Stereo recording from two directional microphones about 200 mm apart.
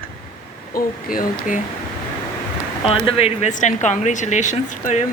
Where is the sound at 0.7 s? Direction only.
45° left (ahead or behind).